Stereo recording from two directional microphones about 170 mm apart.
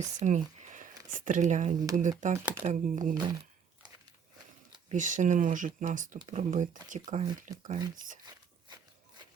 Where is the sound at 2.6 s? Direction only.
45° right (ahead or behind).